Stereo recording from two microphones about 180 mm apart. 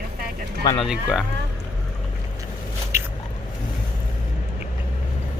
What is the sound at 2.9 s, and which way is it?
Biting, 15° right (ahead or behind).